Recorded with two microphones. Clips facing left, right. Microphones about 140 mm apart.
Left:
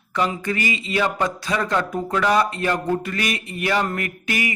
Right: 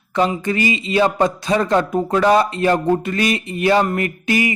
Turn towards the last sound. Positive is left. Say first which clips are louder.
# right 7 dB
turn(degrees=-25)  # may be behind; listen again after turning